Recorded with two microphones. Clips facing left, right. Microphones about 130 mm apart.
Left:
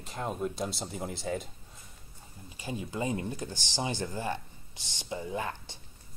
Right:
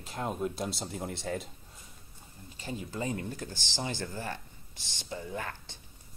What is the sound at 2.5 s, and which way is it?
Speech, 15° left (ahead or behind).